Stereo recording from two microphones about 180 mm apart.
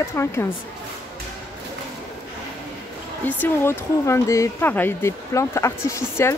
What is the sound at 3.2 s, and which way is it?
Speech, 10° left (ahead or behind).